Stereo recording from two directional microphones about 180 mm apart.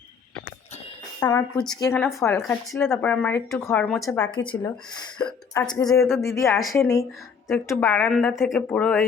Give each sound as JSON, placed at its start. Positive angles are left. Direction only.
{"t": 1.2, "sound": "speech", "side_deg": 20}
{"t": 4.3, "sound": "speech", "side_deg": 25}
{"t": 8.3, "sound": "speech", "side_deg": 0}